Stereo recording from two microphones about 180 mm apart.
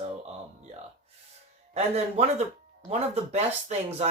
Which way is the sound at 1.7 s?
35° right (ahead or behind).